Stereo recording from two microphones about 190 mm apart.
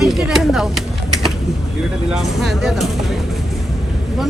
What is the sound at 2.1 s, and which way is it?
Speech, centre (ahead or behind).